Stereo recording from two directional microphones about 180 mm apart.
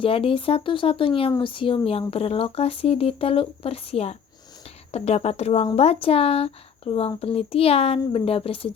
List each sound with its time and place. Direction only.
0.0 s speech: 30° left (ahead or behind)